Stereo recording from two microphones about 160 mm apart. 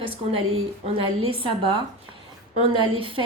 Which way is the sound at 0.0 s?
35° right (ahead or behind).